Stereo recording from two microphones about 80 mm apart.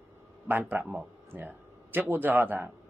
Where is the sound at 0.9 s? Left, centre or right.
Centre.